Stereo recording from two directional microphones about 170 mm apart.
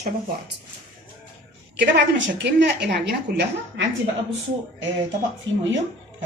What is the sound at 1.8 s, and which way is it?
A woman's voice, 90° right.